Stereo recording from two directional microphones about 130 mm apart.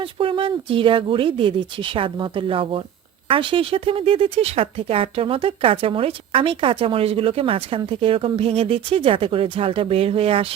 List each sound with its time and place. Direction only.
0.0 s speech: 45° right (ahead or behind)